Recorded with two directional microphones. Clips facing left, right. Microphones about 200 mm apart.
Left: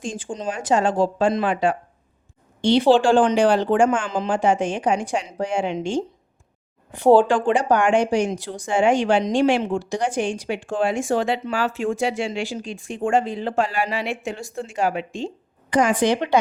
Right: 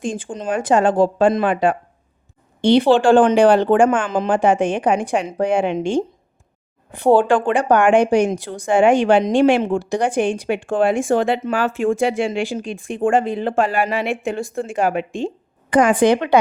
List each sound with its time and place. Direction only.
0.0 s a woman's voice: 55° right (ahead or behind)
7.2 s a woman's voice: 55° right (ahead or behind)